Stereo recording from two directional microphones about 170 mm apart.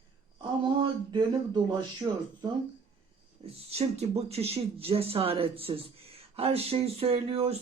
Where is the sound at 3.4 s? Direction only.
35° right (ahead or behind).